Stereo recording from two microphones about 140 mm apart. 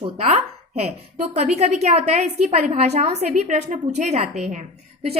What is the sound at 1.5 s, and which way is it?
A woman's voice, 50° right (ahead or behind).